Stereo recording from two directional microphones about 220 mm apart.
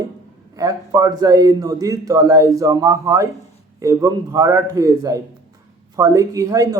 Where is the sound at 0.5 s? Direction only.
15° right (ahead or behind).